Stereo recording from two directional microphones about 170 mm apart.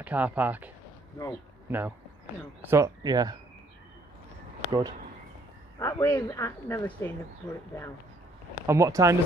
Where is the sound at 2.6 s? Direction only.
20° right (ahead or behind).